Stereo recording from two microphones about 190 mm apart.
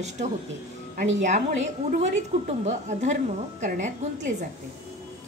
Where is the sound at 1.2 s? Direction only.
40° right (ahead or behind).